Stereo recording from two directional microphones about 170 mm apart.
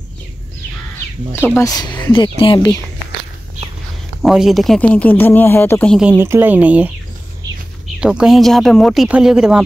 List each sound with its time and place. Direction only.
1.6 s speech: 20° left (ahead or behind)
4.2 s speech: centre (ahead or behind)
5.9 s speech: 10° right (ahead or behind)
8.0 s speech: 5° right (ahead or behind)